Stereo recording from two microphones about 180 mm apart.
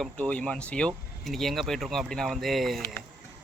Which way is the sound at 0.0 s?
5° left (ahead or behind).